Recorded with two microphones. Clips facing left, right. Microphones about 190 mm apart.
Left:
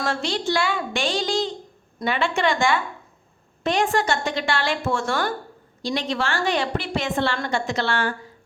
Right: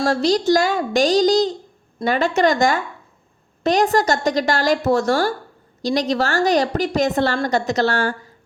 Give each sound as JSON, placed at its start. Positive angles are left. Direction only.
{"t": 0.0, "sound": "a woman's voice", "side_deg": -40}